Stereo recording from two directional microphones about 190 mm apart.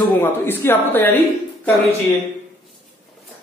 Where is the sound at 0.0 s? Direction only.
10° left (ahead or behind).